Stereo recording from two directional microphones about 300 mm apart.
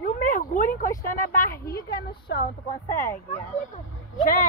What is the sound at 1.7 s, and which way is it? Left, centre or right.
Speech, left.